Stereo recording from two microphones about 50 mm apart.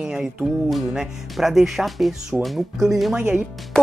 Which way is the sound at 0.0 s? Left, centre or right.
Centre.